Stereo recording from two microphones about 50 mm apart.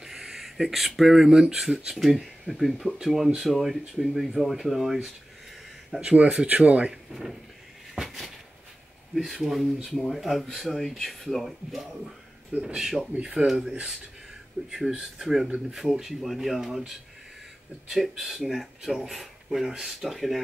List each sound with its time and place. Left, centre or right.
0.0 s a sound: centre
1.4 s speech: centre
6.4 s speech: right
6.9 s speech: centre
7.9 s cupboard open or close: centre
9.1 s speech: centre
13.1 s speech: centre